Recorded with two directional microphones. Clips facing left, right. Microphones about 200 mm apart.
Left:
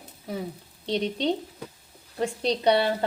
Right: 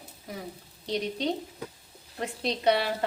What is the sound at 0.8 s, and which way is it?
A woman's voice, 30° left (ahead or behind).